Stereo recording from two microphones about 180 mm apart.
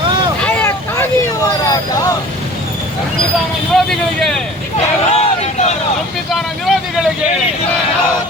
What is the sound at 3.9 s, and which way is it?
Vehicle, 5° left (ahead or behind).